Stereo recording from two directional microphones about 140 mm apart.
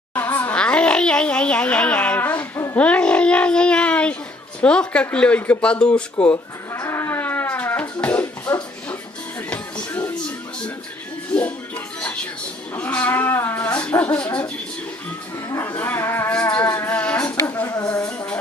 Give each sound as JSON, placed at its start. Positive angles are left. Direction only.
{"t": 0.1, "sound": "a sound", "side_deg": 15}
{"t": 2.7, "sound": "speech", "side_deg": 10}
{"t": 6.3, "sound": "livestock", "side_deg": 20}
{"t": 8.0, "sound": "music", "side_deg": 10}
{"t": 11.3, "sound": "music", "side_deg": 10}
{"t": 12.7, "sound": "a sound", "side_deg": 10}